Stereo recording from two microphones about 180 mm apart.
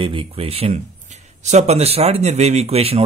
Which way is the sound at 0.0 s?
30° right (ahead or behind).